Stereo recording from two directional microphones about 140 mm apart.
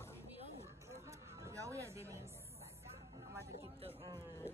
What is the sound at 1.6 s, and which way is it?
Speech, 20° right (ahead or behind).